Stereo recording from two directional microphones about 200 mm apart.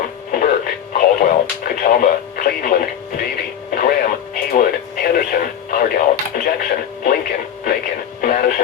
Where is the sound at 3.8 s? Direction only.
45° left (ahead or behind).